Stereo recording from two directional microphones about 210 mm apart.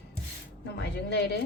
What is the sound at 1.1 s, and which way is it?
Speech, 50° left (ahead or behind).